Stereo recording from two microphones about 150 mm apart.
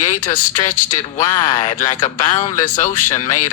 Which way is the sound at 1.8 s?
60° left (ahead or behind).